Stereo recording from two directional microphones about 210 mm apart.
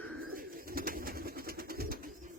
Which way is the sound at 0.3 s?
45° right (ahead or behind).